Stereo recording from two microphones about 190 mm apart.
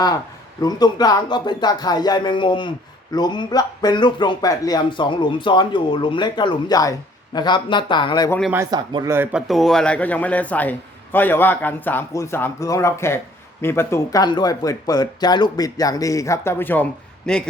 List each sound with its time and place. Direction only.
0.6 s speech: 20° left (ahead or behind)
8.5 s speech: 20° right (ahead or behind); by 17.5 s 5° left (ahead or behind)